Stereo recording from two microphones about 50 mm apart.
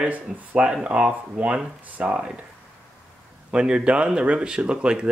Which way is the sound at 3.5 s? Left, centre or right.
Centre.